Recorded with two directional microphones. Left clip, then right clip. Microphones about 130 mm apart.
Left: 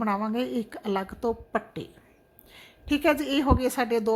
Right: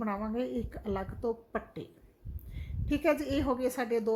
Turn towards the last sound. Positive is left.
turn(degrees=25)  # may be behind; listen again after turning